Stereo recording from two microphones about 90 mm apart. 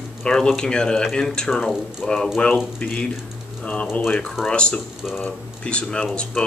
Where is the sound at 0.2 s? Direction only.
5° left (ahead or behind).